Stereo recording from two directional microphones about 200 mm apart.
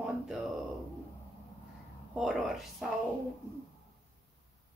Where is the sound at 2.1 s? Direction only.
Centre (ahead or behind).